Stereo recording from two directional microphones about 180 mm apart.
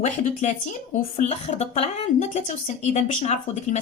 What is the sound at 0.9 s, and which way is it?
A woman's voice, 35° left (ahead or behind).